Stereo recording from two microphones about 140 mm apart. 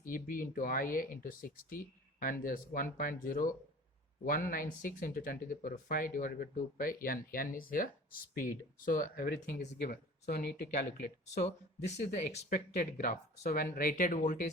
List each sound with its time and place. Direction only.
0.0 s speech: 80° left
4.3 s speech: 90° left; by 12.5 s 50° left (ahead or behind)
12.5 s speech: 85° left; by 14.5 s 65° left (ahead or behind)